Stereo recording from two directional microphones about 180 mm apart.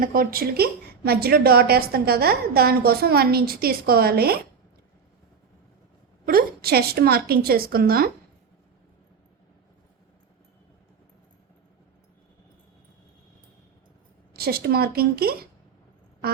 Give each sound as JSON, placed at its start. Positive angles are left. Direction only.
{"t": 0.0, "sound": "a woman's voice", "side_deg": -55}
{"t": 6.2, "sound": "a woman's voice", "side_deg": -55}
{"t": 14.3, "sound": "a woman's voice", "side_deg": -60}